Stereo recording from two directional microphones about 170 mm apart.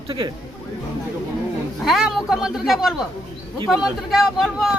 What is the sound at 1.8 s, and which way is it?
Speech, centre (ahead or behind).